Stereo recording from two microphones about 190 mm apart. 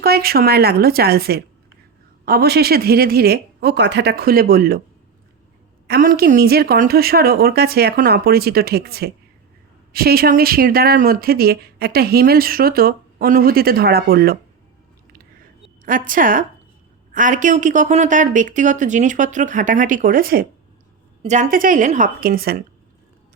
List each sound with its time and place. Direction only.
0.0 s speech: 55° right (ahead or behind)
5.9 s speech: 50° right (ahead or behind)
15.8 s a woman's voice: 45° right (ahead or behind)